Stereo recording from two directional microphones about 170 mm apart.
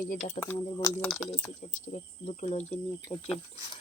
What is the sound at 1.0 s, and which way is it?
Speech, centre (ahead or behind).